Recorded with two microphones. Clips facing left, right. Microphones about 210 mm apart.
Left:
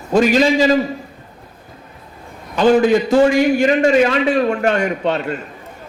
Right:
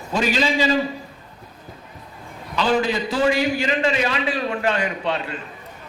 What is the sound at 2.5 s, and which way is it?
A man's voice, 50° left (ahead or behind).